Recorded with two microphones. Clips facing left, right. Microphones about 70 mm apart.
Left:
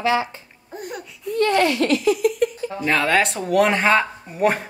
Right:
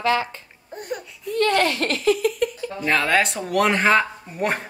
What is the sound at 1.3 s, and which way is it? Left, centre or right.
A child's voice, right.